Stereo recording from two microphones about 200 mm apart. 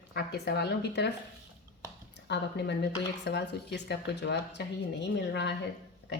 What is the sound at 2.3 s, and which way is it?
Speech, 55° left (ahead or behind).